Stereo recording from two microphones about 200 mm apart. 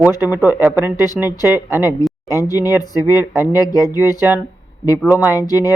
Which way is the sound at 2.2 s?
15° left (ahead or behind).